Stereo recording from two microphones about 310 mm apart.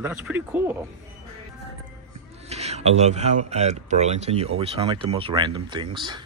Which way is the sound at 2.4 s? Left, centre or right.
Right.